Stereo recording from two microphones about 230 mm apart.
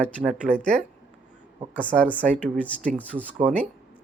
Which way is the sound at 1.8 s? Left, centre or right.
Centre.